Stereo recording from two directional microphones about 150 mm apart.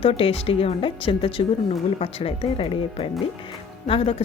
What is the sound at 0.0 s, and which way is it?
A woman's voice, 40° left (ahead or behind).